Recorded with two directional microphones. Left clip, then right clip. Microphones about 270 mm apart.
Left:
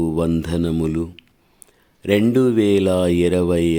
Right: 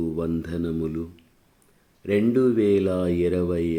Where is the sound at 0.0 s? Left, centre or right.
Left.